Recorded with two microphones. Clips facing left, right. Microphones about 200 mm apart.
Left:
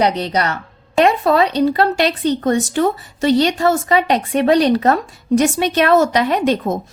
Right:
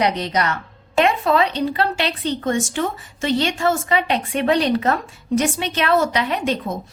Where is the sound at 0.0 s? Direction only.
35° left (ahead or behind).